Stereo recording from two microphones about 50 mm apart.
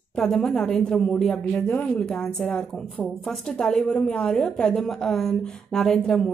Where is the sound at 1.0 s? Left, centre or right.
Centre.